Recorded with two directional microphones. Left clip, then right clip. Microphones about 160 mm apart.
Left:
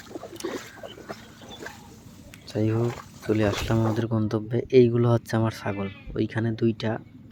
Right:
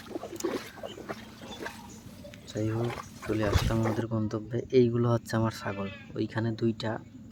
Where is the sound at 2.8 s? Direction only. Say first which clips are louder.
Left 4 dB; 5° left (ahead or behind).